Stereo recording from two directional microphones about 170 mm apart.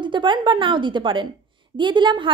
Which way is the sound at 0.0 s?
30° right (ahead or behind).